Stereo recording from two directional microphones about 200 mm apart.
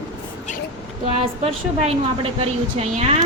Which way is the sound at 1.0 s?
30° right (ahead or behind).